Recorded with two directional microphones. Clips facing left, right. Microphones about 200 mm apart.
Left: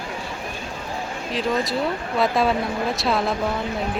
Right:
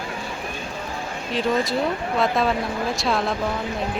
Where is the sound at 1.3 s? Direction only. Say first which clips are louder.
Right 1 dB; centre (ahead or behind).